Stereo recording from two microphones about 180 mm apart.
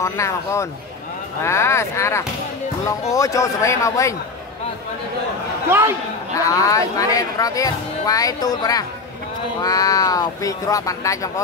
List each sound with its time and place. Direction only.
0.0 s speech: 15° left (ahead or behind)
5.7 s a man's voice: 10° right (ahead or behind)
6.3 s speech: 20° left (ahead or behind)